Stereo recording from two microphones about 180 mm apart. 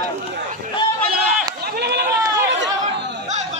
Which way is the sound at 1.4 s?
60° right (ahead or behind).